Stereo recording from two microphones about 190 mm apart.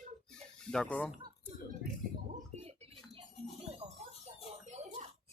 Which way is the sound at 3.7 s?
35° right (ahead or behind).